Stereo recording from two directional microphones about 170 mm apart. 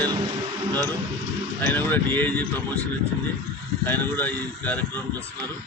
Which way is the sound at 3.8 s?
10° left (ahead or behind).